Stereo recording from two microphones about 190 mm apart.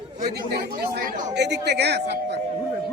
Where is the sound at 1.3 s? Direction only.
60° right (ahead or behind).